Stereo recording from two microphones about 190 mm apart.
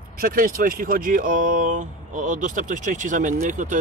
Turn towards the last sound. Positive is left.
turn(degrees=-40)  # may be behind; listen again after turning